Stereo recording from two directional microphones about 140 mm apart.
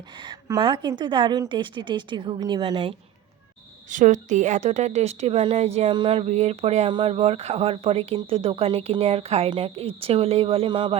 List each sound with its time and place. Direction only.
0.3 s a woman's voice: 30° right (ahead or behind)
3.8 s a woman's voice: 60° right (ahead or behind); by 5.9 s 45° right (ahead or behind)
5.9 s a woman's voice: 35° right (ahead or behind)
6.2 s speech: 50° right (ahead or behind); by 10.9 s 35° right (ahead or behind)